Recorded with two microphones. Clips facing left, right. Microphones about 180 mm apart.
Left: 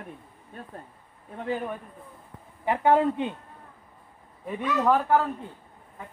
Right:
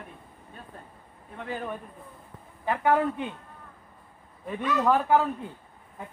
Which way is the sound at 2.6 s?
20° left (ahead or behind).